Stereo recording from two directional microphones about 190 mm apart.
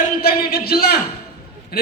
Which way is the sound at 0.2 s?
55° left (ahead or behind).